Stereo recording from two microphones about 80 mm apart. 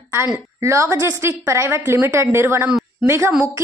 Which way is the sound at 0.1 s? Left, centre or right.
Right.